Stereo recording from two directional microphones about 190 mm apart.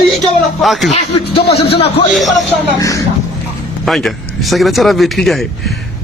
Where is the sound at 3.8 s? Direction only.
Centre (ahead or behind).